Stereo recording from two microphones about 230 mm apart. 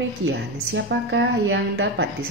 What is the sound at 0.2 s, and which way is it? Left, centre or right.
A woman's voice, right.